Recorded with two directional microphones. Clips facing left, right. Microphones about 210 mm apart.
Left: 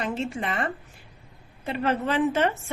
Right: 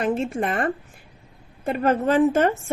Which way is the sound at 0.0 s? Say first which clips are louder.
Right 6 dB; 50° right (ahead or behind).